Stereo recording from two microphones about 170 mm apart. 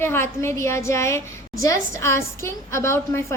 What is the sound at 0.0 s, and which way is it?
A woman's voice, 15° left (ahead or behind).